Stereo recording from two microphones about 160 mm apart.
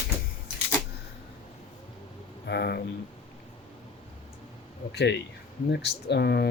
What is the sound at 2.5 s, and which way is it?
Speech, 90° left.